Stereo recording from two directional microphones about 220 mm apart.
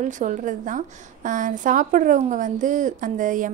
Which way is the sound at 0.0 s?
35° right (ahead or behind).